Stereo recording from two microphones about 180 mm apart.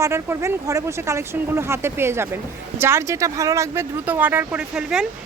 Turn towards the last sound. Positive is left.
turn(degrees=-5)  # may be behind; listen again after turning